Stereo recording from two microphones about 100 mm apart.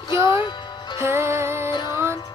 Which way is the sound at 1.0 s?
25° right (ahead or behind).